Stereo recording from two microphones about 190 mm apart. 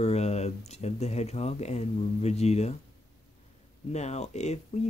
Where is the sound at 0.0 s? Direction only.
35° left (ahead or behind).